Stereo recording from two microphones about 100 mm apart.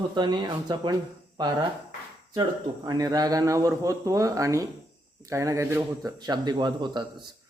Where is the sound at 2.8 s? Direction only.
45° right (ahead or behind).